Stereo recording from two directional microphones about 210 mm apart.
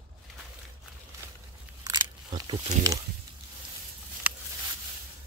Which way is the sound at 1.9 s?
20° right (ahead or behind).